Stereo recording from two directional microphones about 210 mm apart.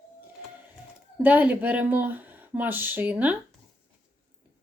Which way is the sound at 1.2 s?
10° right (ahead or behind).